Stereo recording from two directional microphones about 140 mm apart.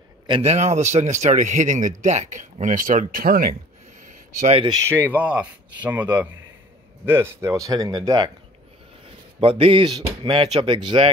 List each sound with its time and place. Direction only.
0.4 s speech: 50° right (ahead or behind); by 3.5 s 90° right
4.1 s a sound: 65° right (ahead or behind)
4.8 s speech: 15° right (ahead or behind)
9.4 s speech: 40° right (ahead or behind)